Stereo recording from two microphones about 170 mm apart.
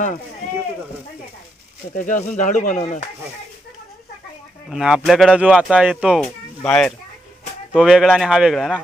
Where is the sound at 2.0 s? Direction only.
50° left (ahead or behind).